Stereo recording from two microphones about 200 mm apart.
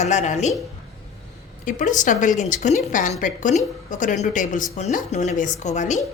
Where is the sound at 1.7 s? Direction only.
40° left (ahead or behind).